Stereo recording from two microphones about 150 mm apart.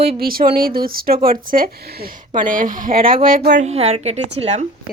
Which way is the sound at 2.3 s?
60° right (ahead or behind).